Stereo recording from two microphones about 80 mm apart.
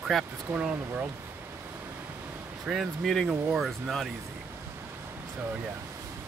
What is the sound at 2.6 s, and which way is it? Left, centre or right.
Speech, centre.